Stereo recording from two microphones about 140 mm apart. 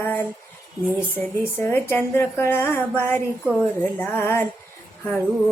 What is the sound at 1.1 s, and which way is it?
Speech, 15° left (ahead or behind).